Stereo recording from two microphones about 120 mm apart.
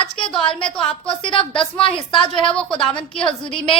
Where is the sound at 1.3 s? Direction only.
45° left (ahead or behind).